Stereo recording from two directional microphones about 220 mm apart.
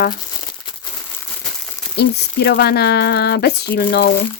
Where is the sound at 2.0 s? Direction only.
50° left (ahead or behind).